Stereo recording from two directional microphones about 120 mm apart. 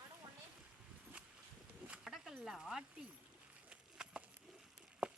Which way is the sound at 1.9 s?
5° right (ahead or behind).